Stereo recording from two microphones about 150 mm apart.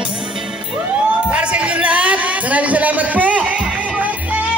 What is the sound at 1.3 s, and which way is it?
Music, 10° right (ahead or behind).